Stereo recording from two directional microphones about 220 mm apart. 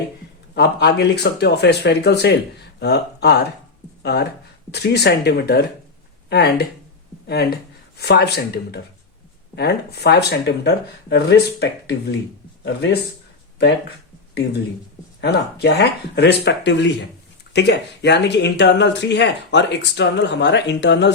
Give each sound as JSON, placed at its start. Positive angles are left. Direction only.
{"t": 0.5, "sound": "speech", "side_deg": 50}
{"t": 15.2, "sound": "speech", "side_deg": 50}